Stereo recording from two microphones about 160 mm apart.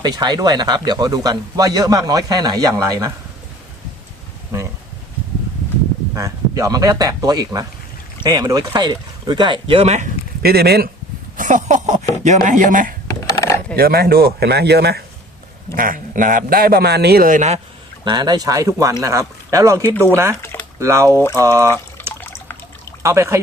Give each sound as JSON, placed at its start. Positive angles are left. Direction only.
{"t": 0.0, "sound": "speech", "side_deg": -25}
{"t": 6.1, "sound": "speech", "side_deg": -20}
{"t": 10.4, "sound": "speech", "side_deg": -80}
{"t": 11.3, "sound": "a man's voice", "side_deg": -50}
{"t": 13.1, "sound": "coin", "side_deg": 20}
{"t": 13.7, "sound": "speech", "side_deg": -75}
{"t": 15.7, "sound": "a man's voice", "side_deg": -60}
{"t": 18.0, "sound": "speech", "side_deg": -25}
{"t": 20.3, "sound": "a sound", "side_deg": 15}
{"t": 20.7, "sound": "speech", "side_deg": -20}
{"t": 22.1, "sound": "water", "side_deg": 15}
{"t": 23.0, "sound": "speech", "side_deg": -15}